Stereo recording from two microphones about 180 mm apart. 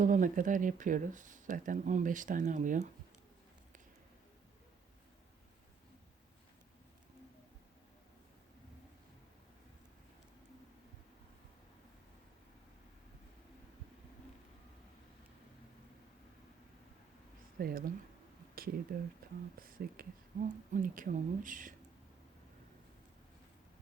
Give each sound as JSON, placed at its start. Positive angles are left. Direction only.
{"t": 0.0, "sound": "speech", "side_deg": -45}
{"t": 17.6, "sound": "speech", "side_deg": -55}
{"t": 19.2, "sound": "a sound", "side_deg": -55}
{"t": 19.5, "sound": "speech", "side_deg": -55}